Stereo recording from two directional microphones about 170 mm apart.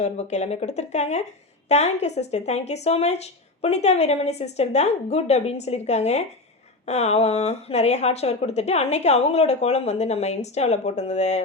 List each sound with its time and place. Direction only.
0.0 s speech: 40° left (ahead or behind)